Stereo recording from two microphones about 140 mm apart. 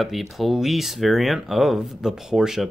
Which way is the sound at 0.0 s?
Centre (ahead or behind).